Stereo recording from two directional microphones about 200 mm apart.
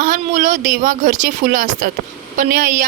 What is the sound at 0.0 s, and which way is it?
A woman's voice, 40° right (ahead or behind).